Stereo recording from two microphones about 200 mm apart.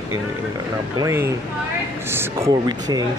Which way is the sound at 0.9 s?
15° right (ahead or behind).